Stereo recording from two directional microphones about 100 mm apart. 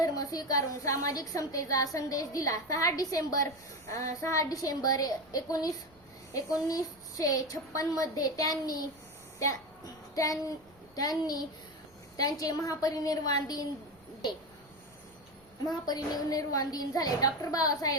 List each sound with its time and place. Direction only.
0.0 s a woman's voice: 40° left (ahead or behind)
9.4 s child singing: 35° left (ahead or behind)
10.9 s a woman's voice: 40° left (ahead or behind)
15.6 s a woman's voice: 40° left (ahead or behind)